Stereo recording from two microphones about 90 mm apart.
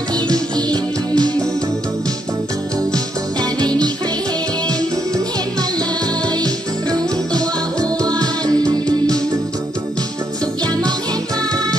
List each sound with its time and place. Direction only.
0.1 s music: 45° right (ahead or behind)
3.3 s music: 50° right (ahead or behind)